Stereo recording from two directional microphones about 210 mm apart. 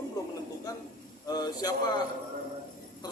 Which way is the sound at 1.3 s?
20° left (ahead or behind).